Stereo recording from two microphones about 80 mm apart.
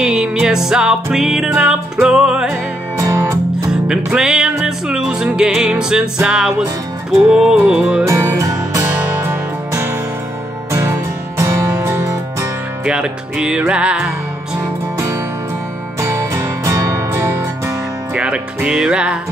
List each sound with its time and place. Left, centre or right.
0.0 s music: centre
2.5 s music: right
3.8 s music: centre
8.0 s music: right
12.8 s music: centre
16.0 s music: right
16.3 s music: right
18.1 s music: centre